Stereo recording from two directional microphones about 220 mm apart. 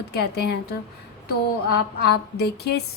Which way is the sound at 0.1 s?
45° left (ahead or behind).